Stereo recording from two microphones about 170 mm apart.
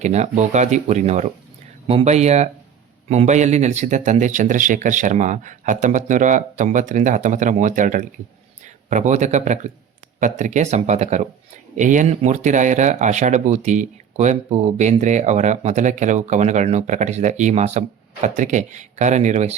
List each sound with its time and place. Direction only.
0.0 s speech: 40° right (ahead or behind)